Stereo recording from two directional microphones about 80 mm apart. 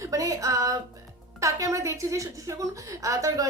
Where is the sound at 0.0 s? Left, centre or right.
Right.